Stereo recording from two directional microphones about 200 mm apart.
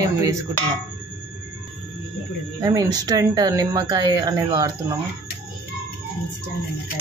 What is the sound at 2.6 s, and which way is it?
Speech, 20° right (ahead or behind).